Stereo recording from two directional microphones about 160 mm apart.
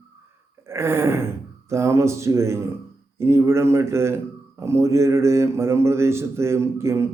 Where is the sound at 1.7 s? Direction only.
20° right (ahead or behind).